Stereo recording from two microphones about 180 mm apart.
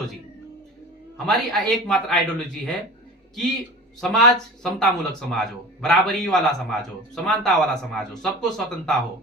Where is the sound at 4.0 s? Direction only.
5° left (ahead or behind).